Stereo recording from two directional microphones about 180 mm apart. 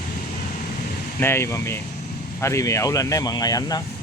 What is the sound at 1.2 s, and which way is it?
Speech, 15° left (ahead or behind).